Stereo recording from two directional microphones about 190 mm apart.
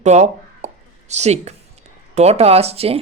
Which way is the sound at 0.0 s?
35° right (ahead or behind).